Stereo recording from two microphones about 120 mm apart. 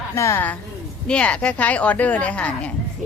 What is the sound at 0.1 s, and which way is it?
Speech, 20° left (ahead or behind).